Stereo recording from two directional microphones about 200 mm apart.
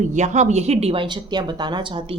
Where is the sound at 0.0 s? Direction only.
35° right (ahead or behind).